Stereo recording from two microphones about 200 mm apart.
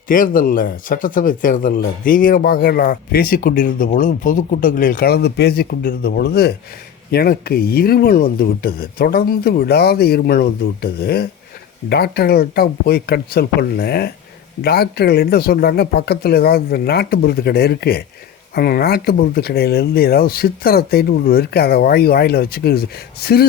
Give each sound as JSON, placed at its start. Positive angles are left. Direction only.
{"t": 0.1, "sound": "speech", "side_deg": 45}